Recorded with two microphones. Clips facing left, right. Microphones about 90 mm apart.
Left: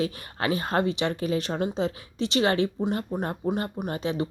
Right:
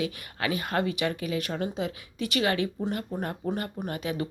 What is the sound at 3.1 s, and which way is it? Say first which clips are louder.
Speech: left 3 dB; 20° left (ahead or behind).